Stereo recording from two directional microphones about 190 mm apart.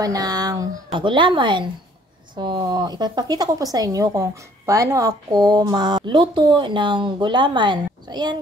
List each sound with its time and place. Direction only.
0.0 s speech: 20° right (ahead or behind)